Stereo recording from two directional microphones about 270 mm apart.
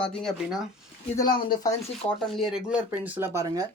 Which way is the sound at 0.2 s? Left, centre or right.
Centre.